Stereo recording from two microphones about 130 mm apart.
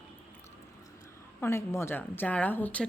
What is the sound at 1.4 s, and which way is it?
A woman's voice, 20° left (ahead or behind).